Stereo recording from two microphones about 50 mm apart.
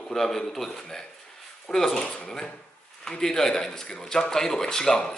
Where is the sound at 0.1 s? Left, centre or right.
Centre.